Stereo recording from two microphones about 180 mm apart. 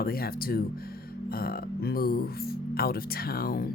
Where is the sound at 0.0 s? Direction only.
55° left (ahead or behind).